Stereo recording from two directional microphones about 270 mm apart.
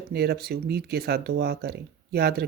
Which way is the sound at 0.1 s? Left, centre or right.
Right.